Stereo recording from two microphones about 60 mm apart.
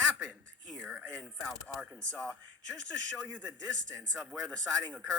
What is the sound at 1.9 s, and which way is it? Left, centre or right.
Speech, centre.